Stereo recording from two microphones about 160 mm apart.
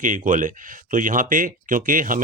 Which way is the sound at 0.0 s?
55° right (ahead or behind).